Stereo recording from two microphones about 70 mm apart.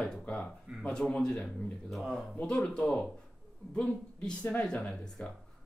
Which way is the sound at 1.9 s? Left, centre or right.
Centre.